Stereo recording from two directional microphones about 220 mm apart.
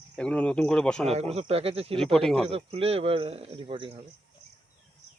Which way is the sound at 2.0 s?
Centre (ahead or behind).